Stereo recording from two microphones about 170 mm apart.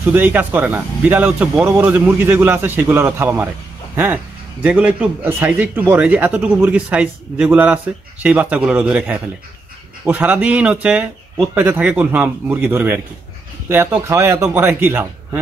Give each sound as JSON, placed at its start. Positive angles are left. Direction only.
{"t": 0.0, "sound": "speech", "side_deg": -10}